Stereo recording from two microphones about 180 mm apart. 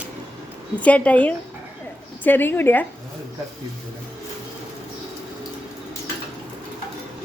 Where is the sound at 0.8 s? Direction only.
5° left (ahead or behind).